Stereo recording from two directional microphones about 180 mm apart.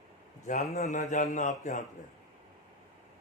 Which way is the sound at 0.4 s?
40° left (ahead or behind).